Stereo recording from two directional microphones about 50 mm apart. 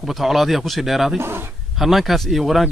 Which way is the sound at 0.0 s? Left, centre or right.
Centre.